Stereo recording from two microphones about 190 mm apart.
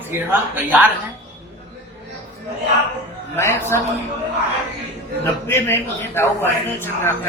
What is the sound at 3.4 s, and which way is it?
Speech, 15° left (ahead or behind).